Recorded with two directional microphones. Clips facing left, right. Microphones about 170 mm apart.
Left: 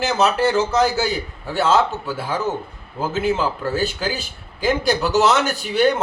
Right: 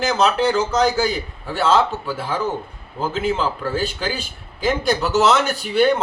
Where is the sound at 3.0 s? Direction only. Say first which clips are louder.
Left 1 dB; 5° left (ahead or behind).